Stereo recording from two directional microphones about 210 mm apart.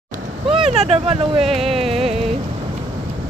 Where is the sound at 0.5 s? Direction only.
30° right (ahead or behind).